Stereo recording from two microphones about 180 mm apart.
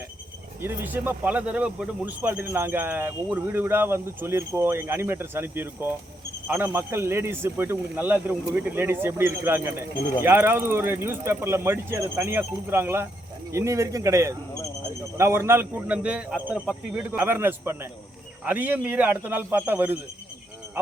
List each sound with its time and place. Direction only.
0.6 s speech: 10° right (ahead or behind)